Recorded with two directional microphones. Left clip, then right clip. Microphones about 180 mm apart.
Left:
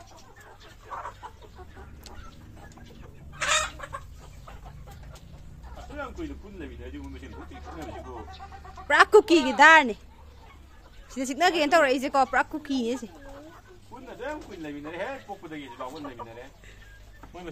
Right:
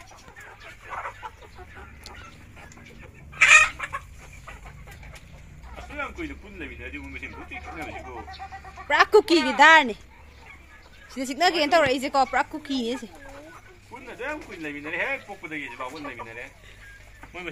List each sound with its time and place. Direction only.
3.3 s chicken: 25° left (ahead or behind)
8.8 s a woman's voice: 20° left (ahead or behind)
9.2 s speech: 5° left (ahead or behind)
11.1 s a woman's voice: 5° left (ahead or behind)
15.8 s a man's voice: 10° right (ahead or behind)